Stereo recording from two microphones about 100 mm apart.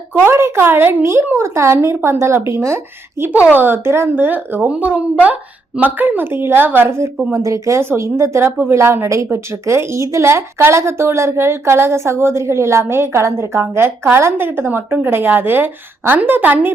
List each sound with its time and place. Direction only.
0.1 s a woman's voice: 25° right (ahead or behind)
3.3 s a woman's voice: 15° right (ahead or behind)